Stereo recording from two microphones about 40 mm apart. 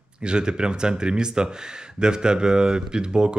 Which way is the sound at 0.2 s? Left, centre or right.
Right.